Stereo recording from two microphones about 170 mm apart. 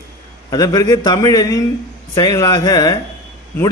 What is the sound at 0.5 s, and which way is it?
A man's voice, 20° left (ahead or behind).